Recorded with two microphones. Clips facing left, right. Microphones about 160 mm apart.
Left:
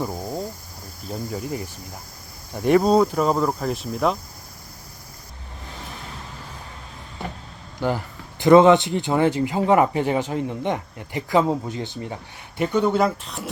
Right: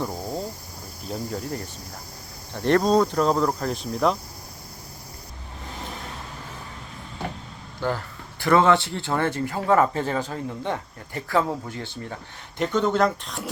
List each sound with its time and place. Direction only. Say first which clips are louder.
0.0 s cricket: left 1 dB; 5° left (ahead or behind)
1.0 s speech: left 1 dB; 5° left (ahead or behind)
7.8 s speech: left 3 dB; 15° left (ahead or behind)